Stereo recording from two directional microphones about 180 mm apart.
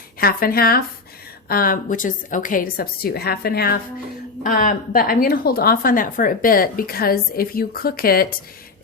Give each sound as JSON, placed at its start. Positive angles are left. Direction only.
{"t": 0.2, "sound": "a woman's voice", "side_deg": 55}